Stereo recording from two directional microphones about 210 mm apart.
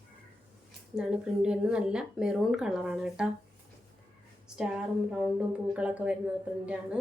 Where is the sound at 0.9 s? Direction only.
5° right (ahead or behind).